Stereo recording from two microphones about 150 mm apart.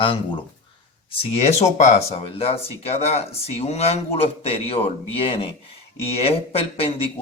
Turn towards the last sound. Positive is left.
turn(degrees=40)  # may be behind; listen again after turning